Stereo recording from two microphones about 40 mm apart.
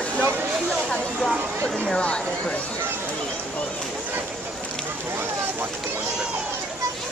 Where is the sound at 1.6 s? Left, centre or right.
Centre.